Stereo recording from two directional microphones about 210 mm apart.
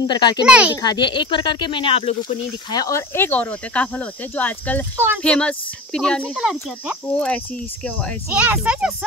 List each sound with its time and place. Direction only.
0.0 s speech: 20° left (ahead or behind)
0.5 s speech: 5° right (ahead or behind)
0.8 s speech: 20° left (ahead or behind); by 8.9 s 5° right (ahead or behind)